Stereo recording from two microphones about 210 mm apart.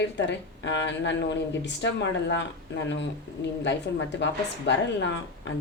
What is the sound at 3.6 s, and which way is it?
A woman's voice, 55° left (ahead or behind).